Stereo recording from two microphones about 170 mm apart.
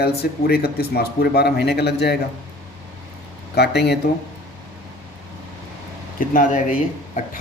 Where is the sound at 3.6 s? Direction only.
80° left.